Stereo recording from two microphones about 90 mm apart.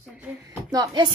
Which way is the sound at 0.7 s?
45° right (ahead or behind).